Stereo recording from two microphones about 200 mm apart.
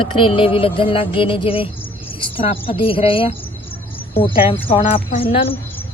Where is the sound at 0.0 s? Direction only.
25° left (ahead or behind).